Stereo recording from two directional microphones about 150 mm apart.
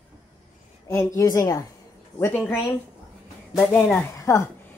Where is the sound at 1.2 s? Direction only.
20° left (ahead or behind).